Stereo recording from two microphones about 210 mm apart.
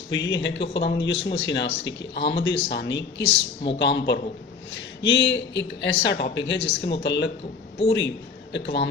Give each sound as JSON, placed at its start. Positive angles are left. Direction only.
{"t": 0.1, "sound": "a man's voice", "side_deg": 60}